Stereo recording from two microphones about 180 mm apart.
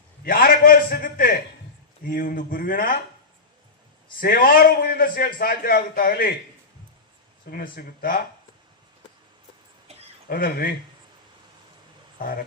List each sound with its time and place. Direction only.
0.3 s a sound: 50° left (ahead or behind)
2.0 s a man's voice: 50° left (ahead or behind)
4.2 s a man's voice: 50° left (ahead or behind)
7.5 s a man's voice: 55° left (ahead or behind)
10.2 s speech: 55° left (ahead or behind)
12.2 s a man's voice: 50° left (ahead or behind)